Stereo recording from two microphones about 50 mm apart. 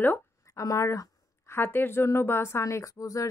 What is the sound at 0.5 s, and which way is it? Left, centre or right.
Speech, left.